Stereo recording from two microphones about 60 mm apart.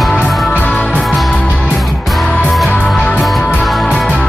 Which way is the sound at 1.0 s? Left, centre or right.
Centre.